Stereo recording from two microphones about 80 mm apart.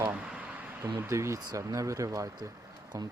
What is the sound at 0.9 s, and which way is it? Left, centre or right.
Speech, right.